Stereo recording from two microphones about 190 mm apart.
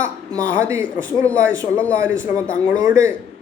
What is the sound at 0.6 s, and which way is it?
A man's voice, 15° right (ahead or behind).